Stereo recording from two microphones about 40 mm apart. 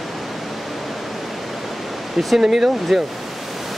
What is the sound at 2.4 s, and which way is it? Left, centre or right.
Speech, centre.